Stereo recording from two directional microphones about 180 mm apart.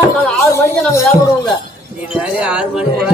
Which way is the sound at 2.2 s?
5° right (ahead or behind).